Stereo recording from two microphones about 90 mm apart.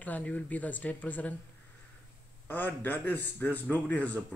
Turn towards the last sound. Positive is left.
turn(degrees=15)  # may be behind; listen again after turning